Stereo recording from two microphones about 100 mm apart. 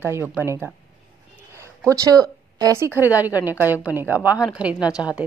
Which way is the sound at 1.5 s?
30° right (ahead or behind).